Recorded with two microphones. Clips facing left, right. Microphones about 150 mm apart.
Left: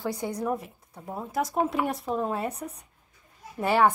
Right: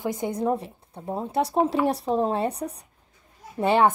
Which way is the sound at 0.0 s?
20° right (ahead or behind).